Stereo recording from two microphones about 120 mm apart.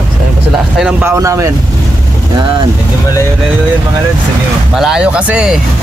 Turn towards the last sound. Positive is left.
turn(degrees=-10)  # may be behind; listen again after turning